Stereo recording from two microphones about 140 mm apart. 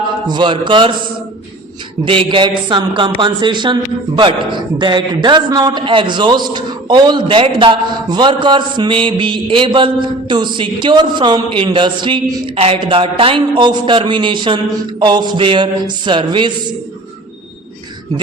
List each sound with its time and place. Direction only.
0.3 s a man's voice: 35° right (ahead or behind)
2.0 s a man's voice: 40° right (ahead or behind)